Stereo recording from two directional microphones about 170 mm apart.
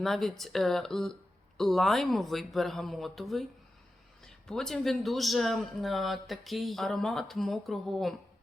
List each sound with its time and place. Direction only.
0.0 s a man's voice: centre (ahead or behind)